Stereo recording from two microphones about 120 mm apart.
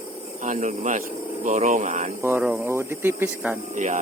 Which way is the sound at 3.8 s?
90° right.